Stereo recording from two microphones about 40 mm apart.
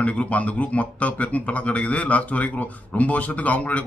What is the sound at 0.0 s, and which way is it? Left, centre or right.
A man's voice, left.